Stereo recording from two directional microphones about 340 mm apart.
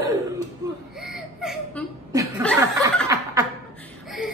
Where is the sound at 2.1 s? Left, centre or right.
Centre.